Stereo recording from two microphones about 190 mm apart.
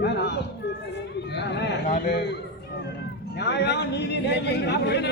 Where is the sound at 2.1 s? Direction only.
60° left (ahead or behind).